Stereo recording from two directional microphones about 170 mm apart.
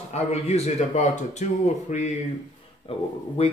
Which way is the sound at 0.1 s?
40° left (ahead or behind).